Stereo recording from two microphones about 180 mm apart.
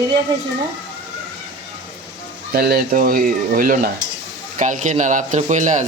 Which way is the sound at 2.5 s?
60° right (ahead or behind).